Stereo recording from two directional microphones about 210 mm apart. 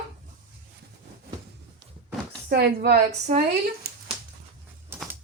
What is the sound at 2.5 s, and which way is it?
Speech, 50° right (ahead or behind).